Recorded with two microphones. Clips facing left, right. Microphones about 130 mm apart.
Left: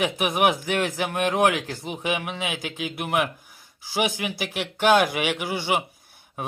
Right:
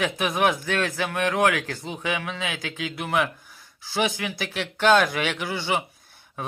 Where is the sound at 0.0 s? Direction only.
15° left (ahead or behind).